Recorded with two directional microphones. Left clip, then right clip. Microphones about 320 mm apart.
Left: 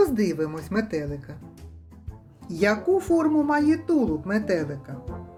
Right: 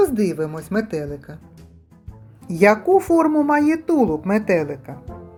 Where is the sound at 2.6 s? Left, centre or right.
Centre.